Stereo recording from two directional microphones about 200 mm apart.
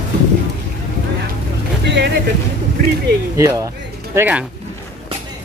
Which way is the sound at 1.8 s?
60° right (ahead or behind).